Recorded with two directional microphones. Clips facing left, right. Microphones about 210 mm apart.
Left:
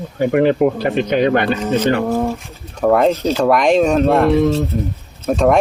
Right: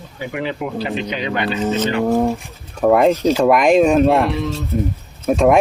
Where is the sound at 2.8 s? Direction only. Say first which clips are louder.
Right 1 dB; 5° right (ahead or behind).